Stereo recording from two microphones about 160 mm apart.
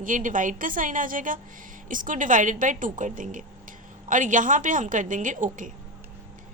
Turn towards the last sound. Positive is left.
turn(degrees=-55)  # may be behind; listen again after turning